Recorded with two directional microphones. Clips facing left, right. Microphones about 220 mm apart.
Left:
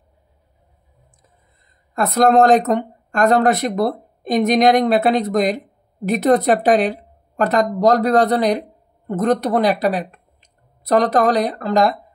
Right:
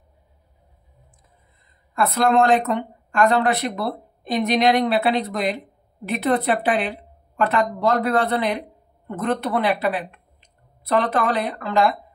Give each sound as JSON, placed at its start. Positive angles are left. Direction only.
{"t": 2.0, "sound": "a woman's voice", "side_deg": 40}